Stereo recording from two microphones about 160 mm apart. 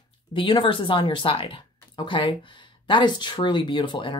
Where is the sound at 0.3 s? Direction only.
30° left (ahead or behind).